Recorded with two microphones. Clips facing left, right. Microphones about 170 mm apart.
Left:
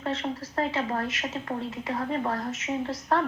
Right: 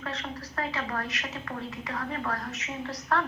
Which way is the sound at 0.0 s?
25° left (ahead or behind).